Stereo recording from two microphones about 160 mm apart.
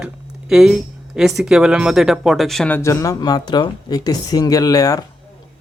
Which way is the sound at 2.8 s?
20° left (ahead or behind).